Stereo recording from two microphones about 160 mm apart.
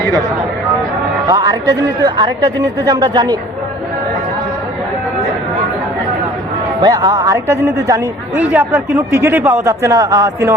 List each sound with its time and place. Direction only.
1.3 s speech: 25° right (ahead or behind)
6.8 s a man's voice: 25° right (ahead or behind)